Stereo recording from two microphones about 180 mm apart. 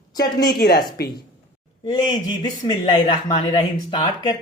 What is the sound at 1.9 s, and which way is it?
Speech, 25° left (ahead or behind).